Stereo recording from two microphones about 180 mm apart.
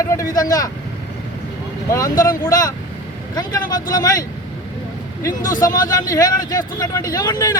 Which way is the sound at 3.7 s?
20° left (ahead or behind).